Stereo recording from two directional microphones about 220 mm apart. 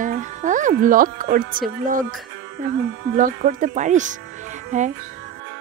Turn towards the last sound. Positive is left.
turn(degrees=-35)  # may be behind; listen again after turning